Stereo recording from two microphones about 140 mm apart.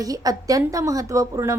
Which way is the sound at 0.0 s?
25° right (ahead or behind).